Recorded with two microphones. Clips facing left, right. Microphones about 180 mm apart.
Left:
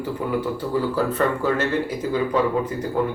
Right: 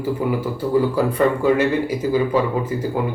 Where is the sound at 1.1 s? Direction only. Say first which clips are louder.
Right 5 dB; 15° right (ahead or behind).